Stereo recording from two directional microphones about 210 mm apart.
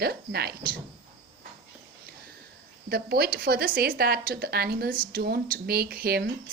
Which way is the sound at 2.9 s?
45° right (ahead or behind).